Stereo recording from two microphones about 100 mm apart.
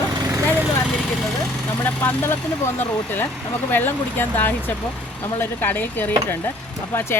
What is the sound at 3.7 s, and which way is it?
Speech, 20° left (ahead or behind).